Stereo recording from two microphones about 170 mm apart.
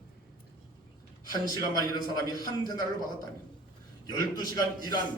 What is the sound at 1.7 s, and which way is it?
A man's voice, 25° left (ahead or behind).